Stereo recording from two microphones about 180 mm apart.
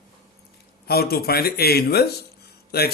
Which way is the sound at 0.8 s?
60° left (ahead or behind).